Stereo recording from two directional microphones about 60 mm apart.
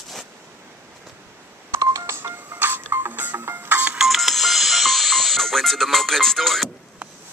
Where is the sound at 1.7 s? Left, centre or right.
Right.